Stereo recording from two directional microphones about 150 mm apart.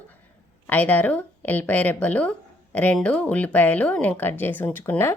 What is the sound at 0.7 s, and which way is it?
Speech, 10° left (ahead or behind).